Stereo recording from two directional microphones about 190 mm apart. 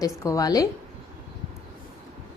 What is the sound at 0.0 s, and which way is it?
Speech, 15° left (ahead or behind).